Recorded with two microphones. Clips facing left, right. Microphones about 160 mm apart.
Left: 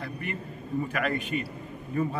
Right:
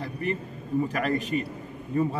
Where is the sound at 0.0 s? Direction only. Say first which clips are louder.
Right 5 dB; 35° right (ahead or behind).